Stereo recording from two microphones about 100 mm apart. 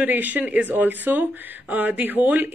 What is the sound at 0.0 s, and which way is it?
Speech, 15° right (ahead or behind).